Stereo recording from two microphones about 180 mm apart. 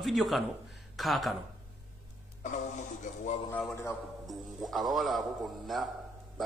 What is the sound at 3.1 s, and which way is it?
Speech, 40° left (ahead or behind).